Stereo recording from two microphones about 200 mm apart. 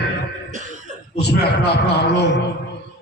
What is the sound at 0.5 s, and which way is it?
Cough, 40° right (ahead or behind).